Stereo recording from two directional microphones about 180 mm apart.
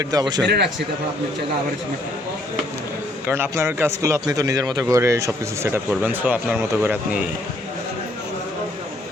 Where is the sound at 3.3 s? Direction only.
15° right (ahead or behind).